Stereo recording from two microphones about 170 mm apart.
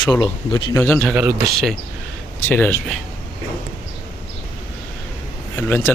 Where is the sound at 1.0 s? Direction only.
5° right (ahead or behind).